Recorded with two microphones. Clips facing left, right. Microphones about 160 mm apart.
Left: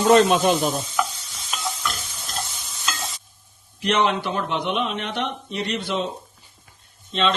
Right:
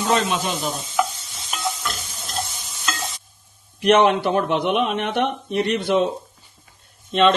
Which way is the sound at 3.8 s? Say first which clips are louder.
Right 6 dB; 55° right (ahead or behind).